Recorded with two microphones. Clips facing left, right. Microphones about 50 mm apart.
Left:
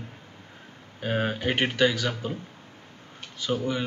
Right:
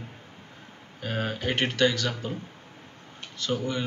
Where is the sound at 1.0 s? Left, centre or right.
Centre.